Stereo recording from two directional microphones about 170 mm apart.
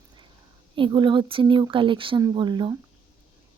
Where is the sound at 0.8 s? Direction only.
30° right (ahead or behind).